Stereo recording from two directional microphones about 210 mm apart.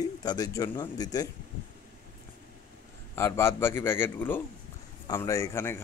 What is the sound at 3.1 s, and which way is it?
A man's voice, 15° left (ahead or behind).